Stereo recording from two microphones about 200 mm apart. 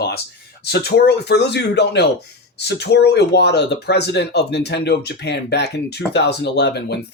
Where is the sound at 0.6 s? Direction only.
55° left (ahead or behind).